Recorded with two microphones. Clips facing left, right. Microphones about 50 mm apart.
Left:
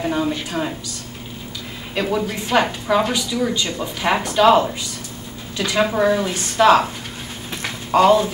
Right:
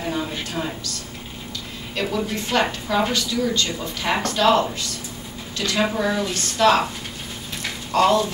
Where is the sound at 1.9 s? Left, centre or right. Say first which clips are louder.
Left 3 dB; centre.